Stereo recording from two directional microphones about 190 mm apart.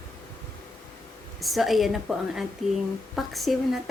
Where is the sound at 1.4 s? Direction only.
Centre (ahead or behind).